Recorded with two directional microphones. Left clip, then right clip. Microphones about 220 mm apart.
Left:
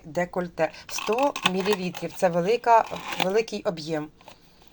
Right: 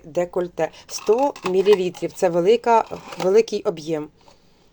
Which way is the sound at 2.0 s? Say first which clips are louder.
Right 4 dB; 45° right (ahead or behind).